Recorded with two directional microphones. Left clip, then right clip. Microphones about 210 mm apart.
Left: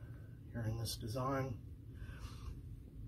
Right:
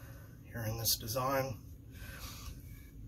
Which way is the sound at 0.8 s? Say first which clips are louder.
Right 8 dB; 25° right (ahead or behind).